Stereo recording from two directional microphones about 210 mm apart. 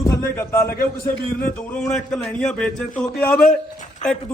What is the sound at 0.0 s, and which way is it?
A man's voice, 15° left (ahead or behind).